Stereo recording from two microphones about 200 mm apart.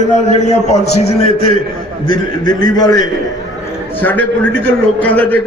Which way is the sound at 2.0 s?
20° left (ahead or behind).